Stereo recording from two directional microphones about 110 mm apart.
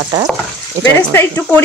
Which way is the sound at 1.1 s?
15° left (ahead or behind).